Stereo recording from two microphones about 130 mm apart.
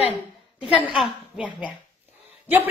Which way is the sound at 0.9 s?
5° right (ahead or behind).